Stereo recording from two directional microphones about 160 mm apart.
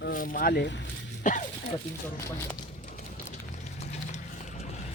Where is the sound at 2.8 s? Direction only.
50° left (ahead or behind).